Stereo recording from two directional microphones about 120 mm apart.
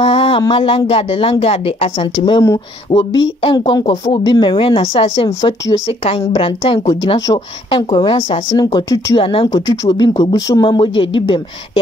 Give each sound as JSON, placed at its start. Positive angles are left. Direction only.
{"t": 0.0, "sound": "a sound", "side_deg": 50}
{"t": 0.4, "sound": "speech", "side_deg": 45}
{"t": 3.8, "sound": "speech", "side_deg": 60}
{"t": 4.2, "sound": "speech", "side_deg": 40}
{"t": 9.7, "sound": "speech", "side_deg": 35}